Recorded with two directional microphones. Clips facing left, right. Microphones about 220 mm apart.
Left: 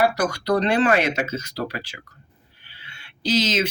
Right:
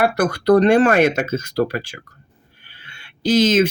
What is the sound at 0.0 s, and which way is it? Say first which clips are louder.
Speech: right 4 dB; 55° right (ahead or behind).